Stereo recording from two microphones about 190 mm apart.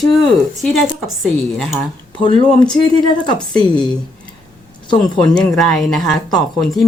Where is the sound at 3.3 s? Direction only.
20° left (ahead or behind).